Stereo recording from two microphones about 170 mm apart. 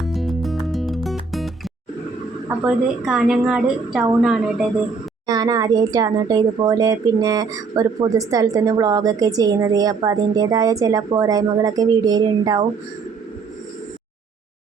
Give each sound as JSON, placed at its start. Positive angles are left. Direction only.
{"t": 0.0, "sound": "music", "side_deg": 0}
{"t": 2.6, "sound": "a woman's voice", "side_deg": -5}
{"t": 5.2, "sound": "speech", "side_deg": -25}